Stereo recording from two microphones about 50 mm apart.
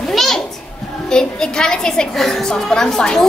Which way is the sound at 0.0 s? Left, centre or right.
Centre.